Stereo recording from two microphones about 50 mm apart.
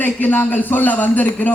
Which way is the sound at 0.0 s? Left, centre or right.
Left.